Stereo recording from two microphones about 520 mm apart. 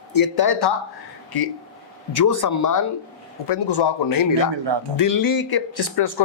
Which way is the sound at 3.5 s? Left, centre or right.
Left.